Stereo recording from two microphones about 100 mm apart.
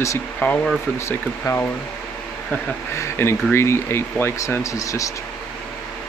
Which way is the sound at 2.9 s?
25° left (ahead or behind).